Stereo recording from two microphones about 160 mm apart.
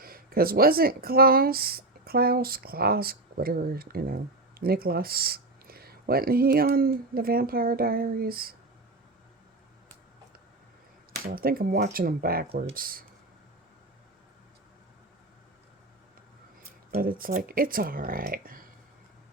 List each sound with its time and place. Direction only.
0.0 s speech: 70° right (ahead or behind)
11.3 s speech: 65° right (ahead or behind)
16.9 s speech: 65° right (ahead or behind)